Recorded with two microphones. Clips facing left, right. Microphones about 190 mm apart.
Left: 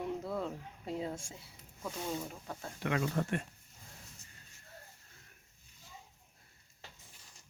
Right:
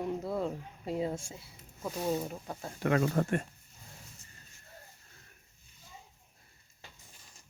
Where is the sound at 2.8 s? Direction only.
45° right (ahead or behind).